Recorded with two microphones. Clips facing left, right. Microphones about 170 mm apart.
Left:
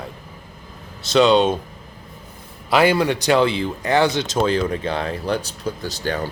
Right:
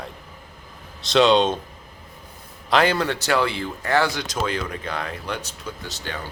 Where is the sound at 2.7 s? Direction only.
10° left (ahead or behind).